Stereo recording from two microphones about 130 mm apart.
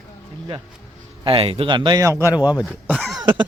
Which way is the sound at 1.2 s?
45° right (ahead or behind).